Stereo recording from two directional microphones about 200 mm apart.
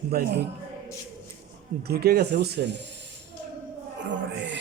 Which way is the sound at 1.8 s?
50° right (ahead or behind).